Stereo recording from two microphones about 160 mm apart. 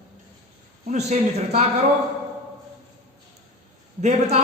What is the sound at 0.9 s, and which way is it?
Speech, 45° right (ahead or behind).